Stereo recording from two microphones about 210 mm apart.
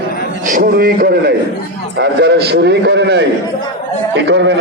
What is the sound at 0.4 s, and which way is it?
A man's voice, 45° right (ahead or behind).